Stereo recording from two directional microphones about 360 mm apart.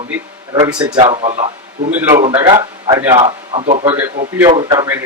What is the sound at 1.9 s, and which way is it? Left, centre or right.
Speech, centre.